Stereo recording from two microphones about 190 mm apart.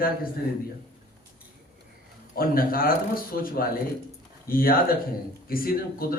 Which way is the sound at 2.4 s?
50° left (ahead or behind).